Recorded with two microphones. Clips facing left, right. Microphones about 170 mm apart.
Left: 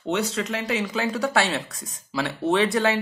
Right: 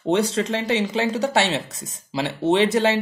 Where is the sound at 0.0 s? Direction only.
30° right (ahead or behind).